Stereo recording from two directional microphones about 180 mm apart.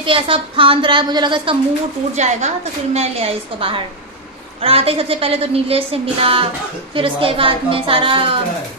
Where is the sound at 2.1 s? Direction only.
40° right (ahead or behind).